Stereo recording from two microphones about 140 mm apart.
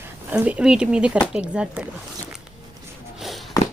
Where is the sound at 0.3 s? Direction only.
10° right (ahead or behind).